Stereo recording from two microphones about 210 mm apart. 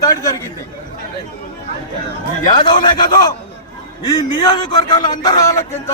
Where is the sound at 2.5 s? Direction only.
20° left (ahead or behind).